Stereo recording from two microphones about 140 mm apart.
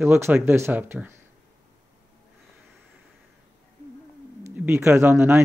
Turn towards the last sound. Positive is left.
turn(degrees=-15)  # may be behind; listen again after turning